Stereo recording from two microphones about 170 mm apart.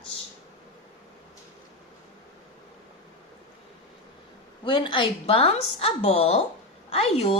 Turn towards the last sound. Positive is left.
turn(degrees=35)  # may be behind; listen again after turning